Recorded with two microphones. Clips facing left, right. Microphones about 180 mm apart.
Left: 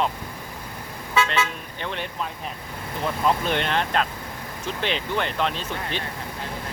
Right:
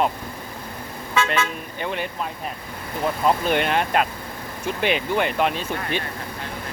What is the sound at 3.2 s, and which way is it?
Speech, 10° right (ahead or behind).